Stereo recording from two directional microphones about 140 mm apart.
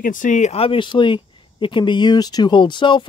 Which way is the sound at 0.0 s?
70° left (ahead or behind).